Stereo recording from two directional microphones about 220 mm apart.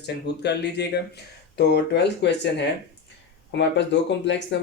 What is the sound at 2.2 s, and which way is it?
Speech, 50° left (ahead or behind).